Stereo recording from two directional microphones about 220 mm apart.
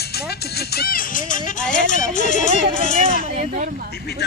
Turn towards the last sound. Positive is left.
turn(degrees=-35)  # may be behind; listen again after turning